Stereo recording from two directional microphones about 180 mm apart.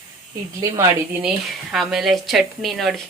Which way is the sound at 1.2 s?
Centre (ahead or behind).